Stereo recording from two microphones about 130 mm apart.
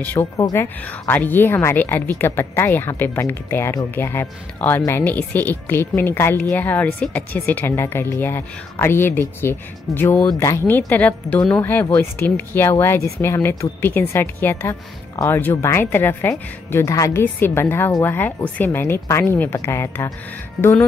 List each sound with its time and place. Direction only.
0.0 s a woman's voice: 15° left (ahead or behind)